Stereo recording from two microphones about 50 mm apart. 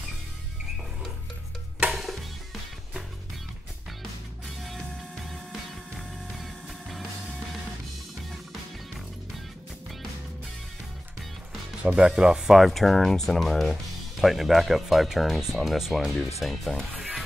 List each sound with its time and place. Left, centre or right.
1.9 s music: centre
5.5 s music: centre
11.8 s speech: right
12.5 s speech: centre